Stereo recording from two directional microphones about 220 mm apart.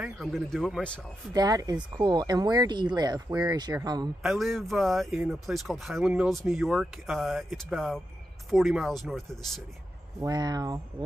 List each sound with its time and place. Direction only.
0.0 s speech: centre (ahead or behind)
1.3 s speech: 15° right (ahead or behind)
4.2 s speech: centre (ahead or behind)
10.2 s speech: 20° right (ahead or behind)